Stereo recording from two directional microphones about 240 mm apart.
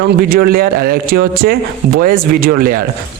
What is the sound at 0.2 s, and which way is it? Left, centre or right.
Speech, right.